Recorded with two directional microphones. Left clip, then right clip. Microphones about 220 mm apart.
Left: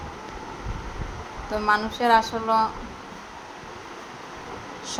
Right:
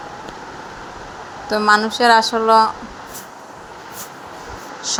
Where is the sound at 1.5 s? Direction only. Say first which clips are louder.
Right 8 dB; 20° right (ahead or behind).